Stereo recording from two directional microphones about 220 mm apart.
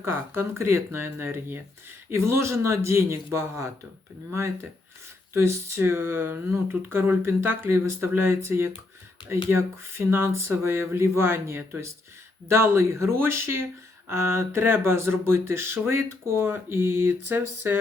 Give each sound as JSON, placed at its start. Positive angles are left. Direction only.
{"t": 0.0, "sound": "speech", "side_deg": -10}